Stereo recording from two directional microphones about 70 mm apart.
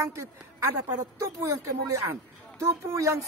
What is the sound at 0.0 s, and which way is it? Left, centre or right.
A woman's voice, right.